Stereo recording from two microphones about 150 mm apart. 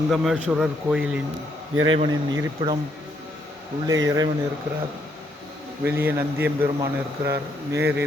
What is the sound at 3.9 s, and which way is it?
Speech, 25° right (ahead or behind).